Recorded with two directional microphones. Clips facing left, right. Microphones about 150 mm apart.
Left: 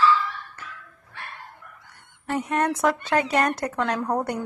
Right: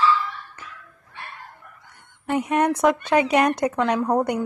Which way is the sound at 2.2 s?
10° right (ahead or behind).